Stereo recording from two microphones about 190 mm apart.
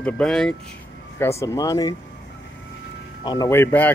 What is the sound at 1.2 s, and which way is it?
Speech, 15° left (ahead or behind).